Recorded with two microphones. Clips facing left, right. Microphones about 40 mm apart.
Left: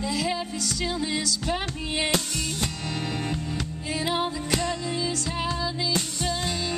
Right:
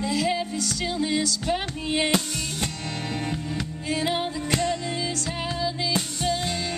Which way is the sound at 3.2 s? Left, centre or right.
Centre.